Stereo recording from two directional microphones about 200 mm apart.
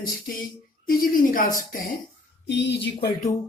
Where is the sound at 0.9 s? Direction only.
45° left (ahead or behind).